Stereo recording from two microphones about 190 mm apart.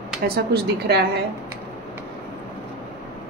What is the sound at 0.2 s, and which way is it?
Speech, 55° right (ahead or behind).